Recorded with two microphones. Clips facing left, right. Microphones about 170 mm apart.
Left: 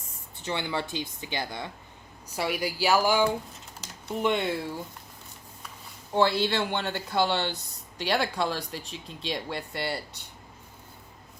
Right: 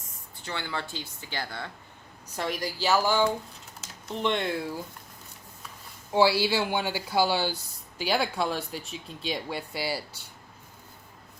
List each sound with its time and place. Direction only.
0.4 s speech: 20° left (ahead or behind); by 4.8 s centre (ahead or behind)
6.1 s speech: 5° right (ahead or behind)